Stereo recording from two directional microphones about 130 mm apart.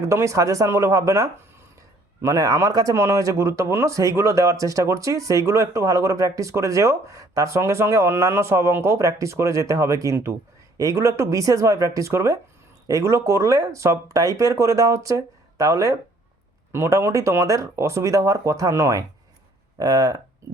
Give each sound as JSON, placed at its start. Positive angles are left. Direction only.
{"t": 0.0, "sound": "speech", "side_deg": -20}